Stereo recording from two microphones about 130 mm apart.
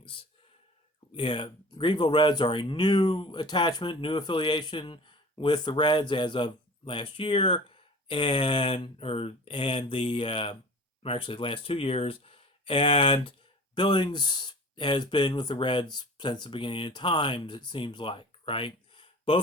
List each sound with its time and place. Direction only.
1.1 s speech: 40° left (ahead or behind)